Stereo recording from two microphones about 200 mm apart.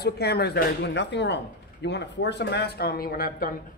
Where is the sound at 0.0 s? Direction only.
55° left (ahead or behind).